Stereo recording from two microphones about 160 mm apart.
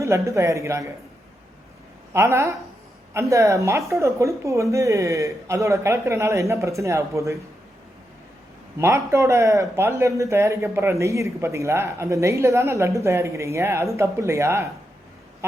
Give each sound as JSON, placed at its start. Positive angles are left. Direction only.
{"t": 0.0, "sound": "speech", "side_deg": -20}
{"t": 2.1, "sound": "speech", "side_deg": -20}
{"t": 8.8, "sound": "speech", "side_deg": -15}